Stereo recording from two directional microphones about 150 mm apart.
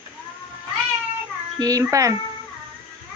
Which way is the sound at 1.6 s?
25° right (ahead or behind).